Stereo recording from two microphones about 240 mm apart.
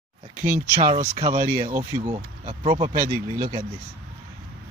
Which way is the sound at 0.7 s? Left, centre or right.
Right.